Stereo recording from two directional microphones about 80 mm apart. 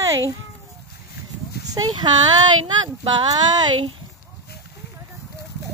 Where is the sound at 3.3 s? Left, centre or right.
Right.